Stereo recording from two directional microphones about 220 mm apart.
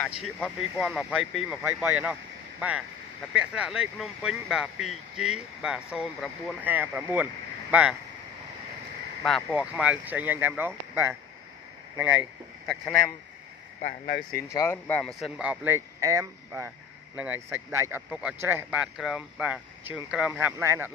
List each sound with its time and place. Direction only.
0.2 s a man's voice: centre (ahead or behind)
3.3 s a man's voice: 5° right (ahead or behind)
9.2 s speech: centre (ahead or behind)
13.7 s speech: 40° left (ahead or behind)
14.3 s a man's voice: 15° left (ahead or behind); by 20.9 s 10° right (ahead or behind)